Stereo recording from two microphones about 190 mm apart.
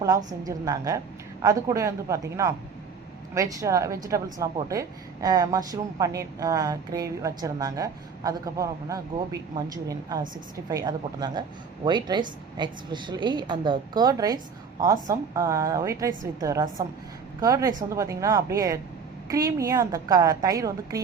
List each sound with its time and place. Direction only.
0.3 s a woman's voice: 20° right (ahead or behind)